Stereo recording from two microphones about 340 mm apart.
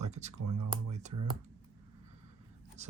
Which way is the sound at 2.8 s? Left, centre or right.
Centre.